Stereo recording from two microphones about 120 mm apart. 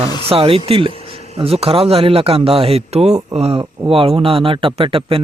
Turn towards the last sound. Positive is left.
turn(degrees=-50)  # may be behind; listen again after turning